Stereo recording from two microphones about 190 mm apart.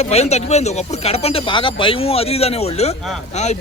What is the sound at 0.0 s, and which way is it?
Speech, 35° left (ahead or behind).